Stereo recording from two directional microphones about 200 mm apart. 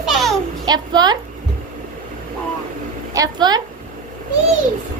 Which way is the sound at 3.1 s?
20° right (ahead or behind).